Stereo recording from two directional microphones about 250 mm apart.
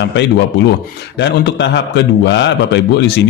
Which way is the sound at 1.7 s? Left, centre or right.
Left.